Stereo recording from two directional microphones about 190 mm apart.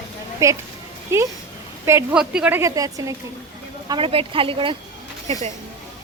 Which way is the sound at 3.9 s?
30° right (ahead or behind).